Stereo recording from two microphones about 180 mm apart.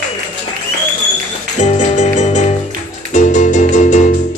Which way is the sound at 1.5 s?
40° left (ahead or behind).